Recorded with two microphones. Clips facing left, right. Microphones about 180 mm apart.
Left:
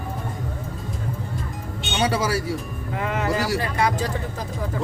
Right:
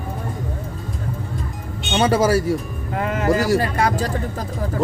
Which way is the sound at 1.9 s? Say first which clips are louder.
Right 6 dB; 50° right (ahead or behind).